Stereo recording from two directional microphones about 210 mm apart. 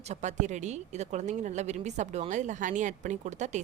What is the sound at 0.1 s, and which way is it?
A woman's voice, 35° right (ahead or behind).